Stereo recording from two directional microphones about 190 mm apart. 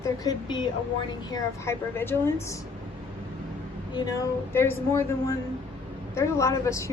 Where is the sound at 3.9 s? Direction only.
20° left (ahead or behind).